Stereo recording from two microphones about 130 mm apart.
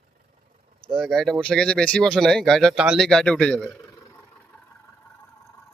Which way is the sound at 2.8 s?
5° right (ahead or behind).